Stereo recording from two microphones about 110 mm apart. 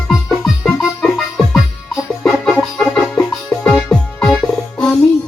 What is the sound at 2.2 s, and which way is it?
Music, 5° left (ahead or behind).